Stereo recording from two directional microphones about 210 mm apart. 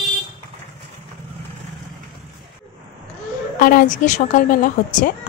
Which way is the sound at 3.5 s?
40° left (ahead or behind).